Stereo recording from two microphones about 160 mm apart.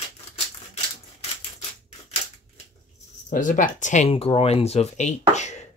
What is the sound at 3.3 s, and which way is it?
Speech, 55° left (ahead or behind).